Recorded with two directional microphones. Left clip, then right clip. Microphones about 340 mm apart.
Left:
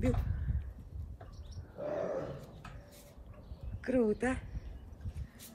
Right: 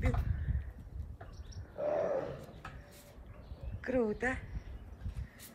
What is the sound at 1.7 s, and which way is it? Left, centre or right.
Wild animals, right.